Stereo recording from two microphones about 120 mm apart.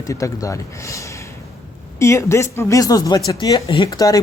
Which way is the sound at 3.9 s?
30° left (ahead or behind).